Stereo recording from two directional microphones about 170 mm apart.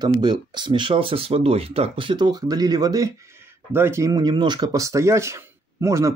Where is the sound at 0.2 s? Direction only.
25° right (ahead or behind).